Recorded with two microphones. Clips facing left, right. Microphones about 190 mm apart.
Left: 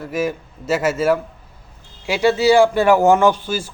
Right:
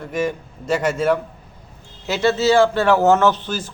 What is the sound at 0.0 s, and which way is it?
A man's voice, 5° left (ahead or behind).